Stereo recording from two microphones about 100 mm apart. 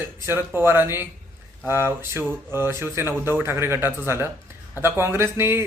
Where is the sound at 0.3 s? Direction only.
25° right (ahead or behind).